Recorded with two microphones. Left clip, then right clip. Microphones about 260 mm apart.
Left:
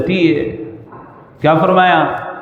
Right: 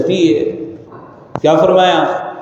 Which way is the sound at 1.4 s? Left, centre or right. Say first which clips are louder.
Right 1 dB; left.